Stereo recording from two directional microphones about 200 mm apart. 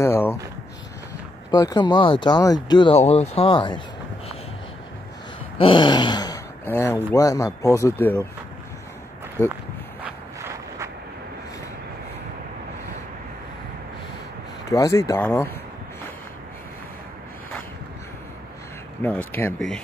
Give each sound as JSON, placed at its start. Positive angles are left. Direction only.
{"t": 0.0, "sound": "a sound", "side_deg": 10}
{"t": 1.5, "sound": "speech", "side_deg": 20}
{"t": 5.6, "sound": "speech", "side_deg": 25}
{"t": 10.0, "sound": "a sound", "side_deg": -10}
{"t": 14.7, "sound": "speech", "side_deg": 15}
{"t": 19.0, "sound": "speech", "side_deg": 10}